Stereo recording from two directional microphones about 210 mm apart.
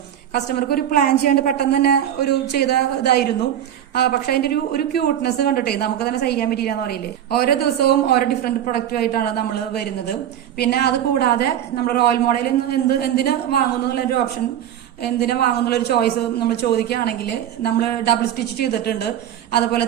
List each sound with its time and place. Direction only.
0.3 s speech: 45° left (ahead or behind)